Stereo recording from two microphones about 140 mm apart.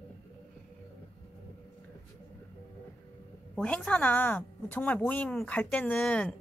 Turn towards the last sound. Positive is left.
turn(degrees=5)  # may be behind; listen again after turning